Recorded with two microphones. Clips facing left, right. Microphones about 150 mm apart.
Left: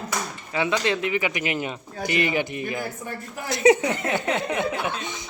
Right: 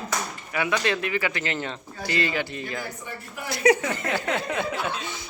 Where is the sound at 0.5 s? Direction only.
20° left (ahead or behind).